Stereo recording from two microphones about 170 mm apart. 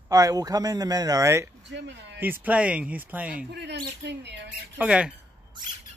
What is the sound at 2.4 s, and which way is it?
Speech, 10° right (ahead or behind).